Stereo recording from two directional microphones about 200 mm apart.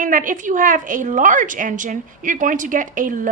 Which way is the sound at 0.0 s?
40° right (ahead or behind).